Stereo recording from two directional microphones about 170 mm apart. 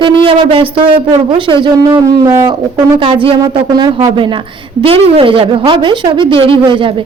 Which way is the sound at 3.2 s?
30° right (ahead or behind).